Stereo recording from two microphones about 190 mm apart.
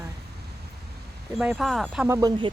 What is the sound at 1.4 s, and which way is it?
Speech, 5° right (ahead or behind).